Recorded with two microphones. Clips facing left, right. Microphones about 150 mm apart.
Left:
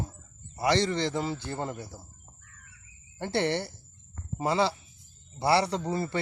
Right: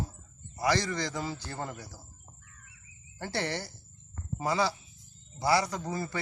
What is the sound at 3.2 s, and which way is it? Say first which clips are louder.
Speech: left 6 dB; 25° left (ahead or behind).